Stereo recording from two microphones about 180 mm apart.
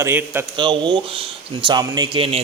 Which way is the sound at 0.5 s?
25° right (ahead or behind).